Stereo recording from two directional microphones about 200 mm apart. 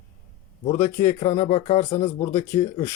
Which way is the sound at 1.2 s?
35° left (ahead or behind).